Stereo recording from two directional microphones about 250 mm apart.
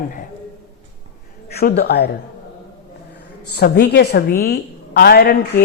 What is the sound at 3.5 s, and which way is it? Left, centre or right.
A woman's voice, left.